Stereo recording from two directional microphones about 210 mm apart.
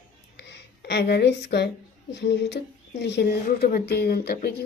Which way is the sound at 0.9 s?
50° left (ahead or behind).